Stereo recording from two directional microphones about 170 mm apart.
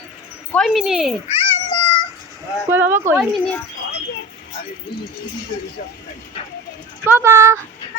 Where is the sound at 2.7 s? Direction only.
10° right (ahead or behind).